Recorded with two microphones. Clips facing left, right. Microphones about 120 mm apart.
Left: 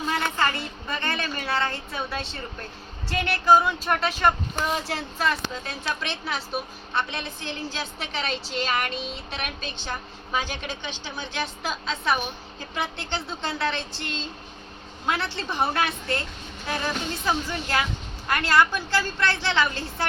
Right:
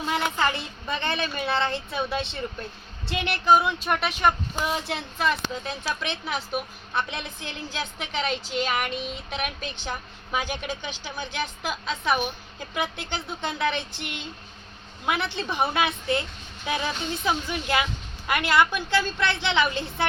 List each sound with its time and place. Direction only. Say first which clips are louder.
0.1 s a woman's voice: right 1 dB; 15° right (ahead or behind)